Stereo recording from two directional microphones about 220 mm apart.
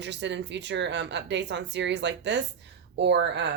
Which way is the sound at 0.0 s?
55° right (ahead or behind).